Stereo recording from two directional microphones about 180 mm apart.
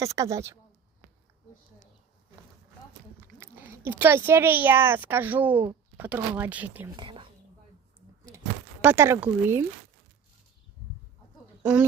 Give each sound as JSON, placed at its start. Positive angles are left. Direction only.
{"t": 0.0, "sound": "speech", "side_deg": -15}
{"t": 3.4, "sound": "speech", "side_deg": -15}
{"t": 6.9, "sound": "speech", "side_deg": -25}
{"t": 8.8, "sound": "speech", "side_deg": -10}
{"t": 11.6, "sound": "speech", "side_deg": -5}